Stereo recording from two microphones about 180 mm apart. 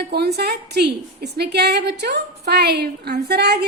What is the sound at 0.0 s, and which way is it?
A woman's voice, 65° right (ahead or behind).